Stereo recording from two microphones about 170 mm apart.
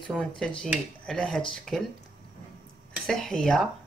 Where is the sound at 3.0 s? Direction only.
5° left (ahead or behind).